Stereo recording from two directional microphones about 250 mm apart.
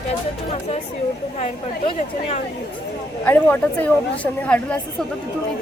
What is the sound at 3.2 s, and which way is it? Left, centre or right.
A woman's voice, centre.